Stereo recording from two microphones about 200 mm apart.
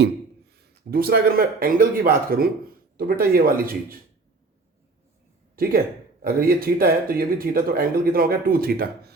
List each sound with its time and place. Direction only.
0.9 s a man's voice: 50° right (ahead or behind)
6.2 s a man's voice: 45° right (ahead or behind)